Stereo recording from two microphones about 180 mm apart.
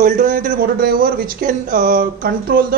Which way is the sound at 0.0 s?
45° right (ahead or behind).